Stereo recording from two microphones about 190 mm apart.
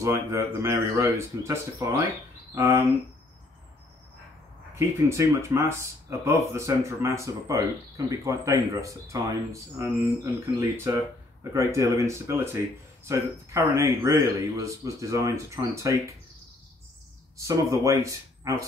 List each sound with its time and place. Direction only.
0.0 s speech: 15° right (ahead or behind)
4.7 s speech: 15° right (ahead or behind)
17.4 s speech: 15° right (ahead or behind)